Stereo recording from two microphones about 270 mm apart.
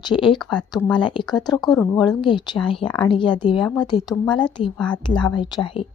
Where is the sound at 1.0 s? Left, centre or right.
Centre.